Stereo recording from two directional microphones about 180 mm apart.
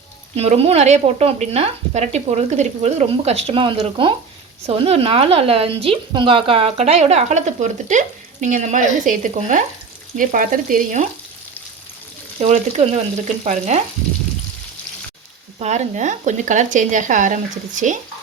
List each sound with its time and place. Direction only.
0.3 s speech: 35° right (ahead or behind)
12.4 s speech: 40° right (ahead or behind)
15.5 s speech: 40° right (ahead or behind)